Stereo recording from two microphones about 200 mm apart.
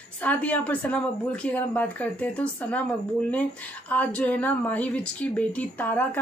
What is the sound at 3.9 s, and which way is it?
Speech, 5° left (ahead or behind).